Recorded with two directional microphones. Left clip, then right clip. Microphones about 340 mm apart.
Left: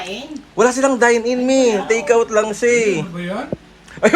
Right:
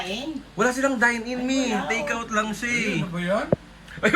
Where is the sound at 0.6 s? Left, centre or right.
Centre.